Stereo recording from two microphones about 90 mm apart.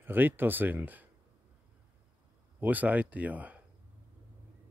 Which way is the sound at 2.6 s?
20° right (ahead or behind).